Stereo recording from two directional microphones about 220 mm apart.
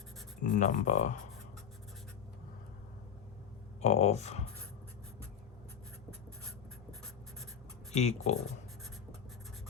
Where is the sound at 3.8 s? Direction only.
30° left (ahead or behind).